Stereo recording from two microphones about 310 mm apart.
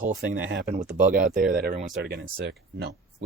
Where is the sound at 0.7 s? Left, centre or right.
Right.